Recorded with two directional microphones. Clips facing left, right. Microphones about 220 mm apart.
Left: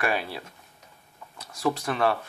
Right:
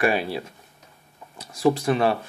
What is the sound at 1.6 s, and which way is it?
Speech, 25° right (ahead or behind).